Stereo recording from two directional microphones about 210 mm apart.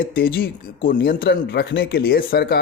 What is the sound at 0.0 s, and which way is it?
Speech, 45° left (ahead or behind).